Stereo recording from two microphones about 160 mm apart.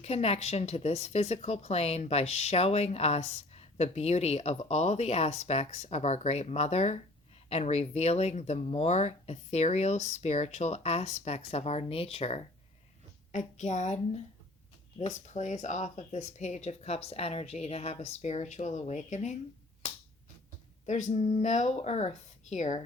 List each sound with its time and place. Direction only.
0.0 s a woman's voice: 40° left (ahead or behind)
20.8 s speech: 50° left (ahead or behind)